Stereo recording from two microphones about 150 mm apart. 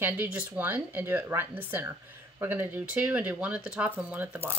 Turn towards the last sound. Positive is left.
turn(degrees=-10)  # may be behind; listen again after turning